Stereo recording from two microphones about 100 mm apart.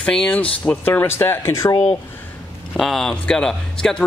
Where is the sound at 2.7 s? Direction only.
5° left (ahead or behind).